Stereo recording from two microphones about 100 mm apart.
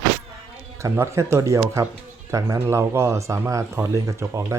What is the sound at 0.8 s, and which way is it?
Speech, 30° right (ahead or behind).